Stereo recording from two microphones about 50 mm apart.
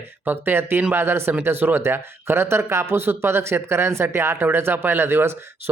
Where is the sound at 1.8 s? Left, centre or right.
Right.